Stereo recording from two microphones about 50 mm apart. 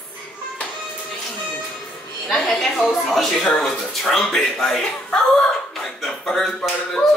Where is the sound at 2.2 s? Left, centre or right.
Centre.